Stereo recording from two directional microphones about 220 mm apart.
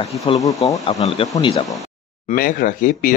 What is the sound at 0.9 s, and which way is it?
Speech, 30° left (ahead or behind).